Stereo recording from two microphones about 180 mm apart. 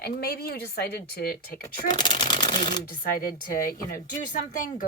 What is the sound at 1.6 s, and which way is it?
Speech, 25° left (ahead or behind).